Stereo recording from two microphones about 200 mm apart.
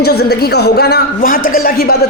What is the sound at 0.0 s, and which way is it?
A man's voice, 55° left (ahead or behind).